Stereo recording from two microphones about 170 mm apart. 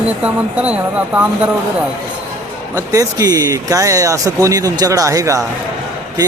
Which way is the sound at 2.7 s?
20° right (ahead or behind).